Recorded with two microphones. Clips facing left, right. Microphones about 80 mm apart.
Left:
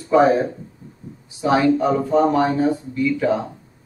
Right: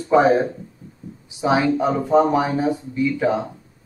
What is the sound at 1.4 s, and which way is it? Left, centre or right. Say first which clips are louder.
Speech: left 2 dB; centre.